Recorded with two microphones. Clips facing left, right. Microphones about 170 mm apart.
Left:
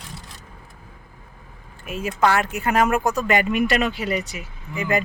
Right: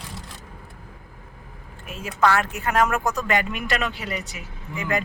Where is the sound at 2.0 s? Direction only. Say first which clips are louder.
Left 1 dB; 15° left (ahead or behind).